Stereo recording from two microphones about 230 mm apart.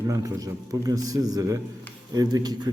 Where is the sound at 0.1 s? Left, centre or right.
Centre.